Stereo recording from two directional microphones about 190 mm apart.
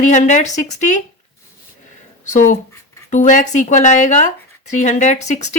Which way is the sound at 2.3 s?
45° left (ahead or behind).